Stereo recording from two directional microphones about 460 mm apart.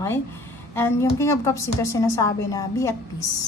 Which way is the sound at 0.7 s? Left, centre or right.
Centre.